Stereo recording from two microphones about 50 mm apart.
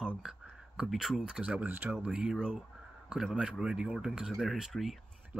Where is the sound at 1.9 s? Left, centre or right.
Right.